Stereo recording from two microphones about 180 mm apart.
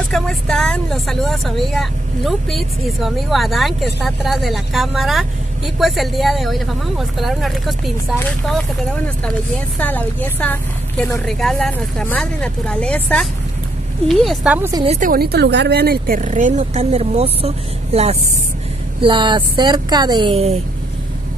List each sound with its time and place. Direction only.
0.1 s speech: centre (ahead or behind)
9.8 s speech: 10° left (ahead or behind); by 14.7 s 5° right (ahead or behind)
14.9 s speech: 50° right (ahead or behind); by 20.5 s 30° right (ahead or behind)